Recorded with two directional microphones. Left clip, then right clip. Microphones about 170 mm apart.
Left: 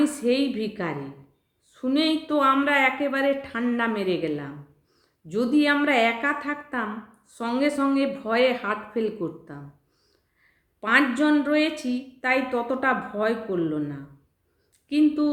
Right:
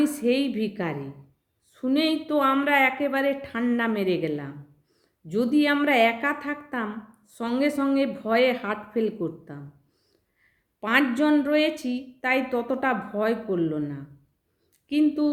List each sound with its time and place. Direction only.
0.0 s a woman's voice: 35° right (ahead or behind)
10.8 s a woman's voice: 35° right (ahead or behind)